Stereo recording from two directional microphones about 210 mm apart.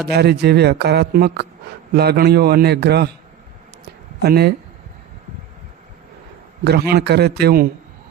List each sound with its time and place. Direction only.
0.1 s speech: 50° right (ahead or behind)
3.8 s a sound: 50° right (ahead or behind)
6.7 s speech: 50° right (ahead or behind)